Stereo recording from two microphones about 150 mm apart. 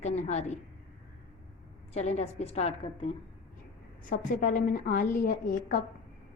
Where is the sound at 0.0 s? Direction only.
50° left (ahead or behind).